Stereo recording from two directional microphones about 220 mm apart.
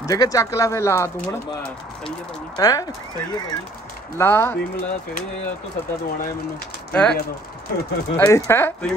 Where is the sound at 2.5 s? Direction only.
15° left (ahead or behind).